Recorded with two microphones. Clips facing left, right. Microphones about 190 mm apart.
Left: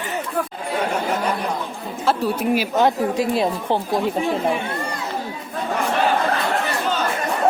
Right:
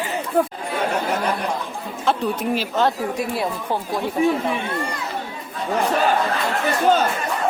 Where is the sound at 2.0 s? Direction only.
10° left (ahead or behind).